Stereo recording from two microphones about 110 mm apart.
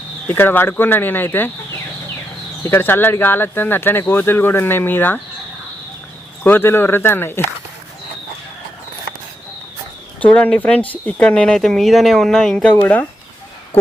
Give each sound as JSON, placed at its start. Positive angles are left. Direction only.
{"t": 0.3, "sound": "speech", "side_deg": 20}
{"t": 2.6, "sound": "speech", "side_deg": 20}
{"t": 6.4, "sound": "speech", "side_deg": 20}
{"t": 10.2, "sound": "speech", "side_deg": 15}